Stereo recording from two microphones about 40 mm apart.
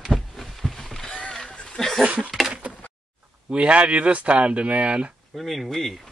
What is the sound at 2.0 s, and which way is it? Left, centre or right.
Speech, right.